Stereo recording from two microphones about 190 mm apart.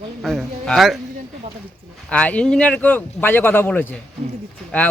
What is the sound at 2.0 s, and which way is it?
Speech, 5° left (ahead or behind).